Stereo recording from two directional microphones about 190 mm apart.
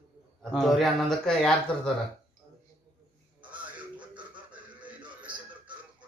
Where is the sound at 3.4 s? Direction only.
10° right (ahead or behind).